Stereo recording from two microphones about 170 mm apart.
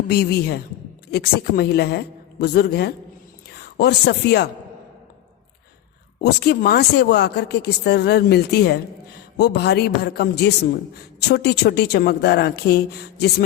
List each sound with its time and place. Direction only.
0.1 s speech: 70° left (ahead or behind)
6.2 s speech: 70° left (ahead or behind)